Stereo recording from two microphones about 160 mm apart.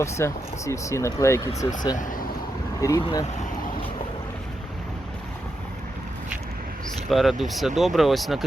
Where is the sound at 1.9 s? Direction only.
55° left (ahead or behind).